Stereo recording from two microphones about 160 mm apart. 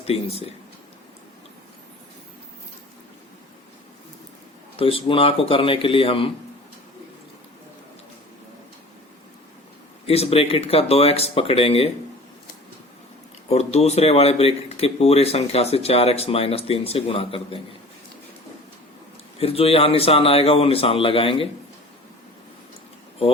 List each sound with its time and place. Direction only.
0.1 s speech: 40° left (ahead or behind)
4.8 s speech: 35° left (ahead or behind)
10.1 s speech: 40° left (ahead or behind)
13.5 s speech: 40° left (ahead or behind)
19.4 s speech: 35° left (ahead or behind)